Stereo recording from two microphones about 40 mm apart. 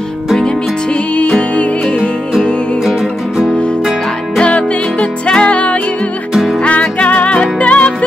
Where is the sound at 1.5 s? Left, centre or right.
Left.